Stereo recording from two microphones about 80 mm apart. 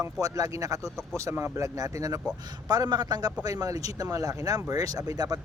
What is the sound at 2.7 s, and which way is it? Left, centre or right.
A man's voice, right.